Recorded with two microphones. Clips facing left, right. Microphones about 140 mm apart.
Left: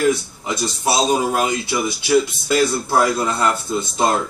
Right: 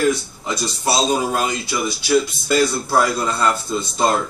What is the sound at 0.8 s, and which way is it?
A man's voice, 15° left (ahead or behind).